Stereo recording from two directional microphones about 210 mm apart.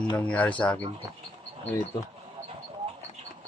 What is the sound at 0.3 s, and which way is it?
Speech, 5° left (ahead or behind).